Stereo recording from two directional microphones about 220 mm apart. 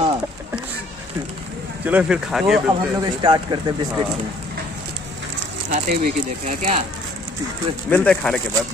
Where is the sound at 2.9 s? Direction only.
20° right (ahead or behind).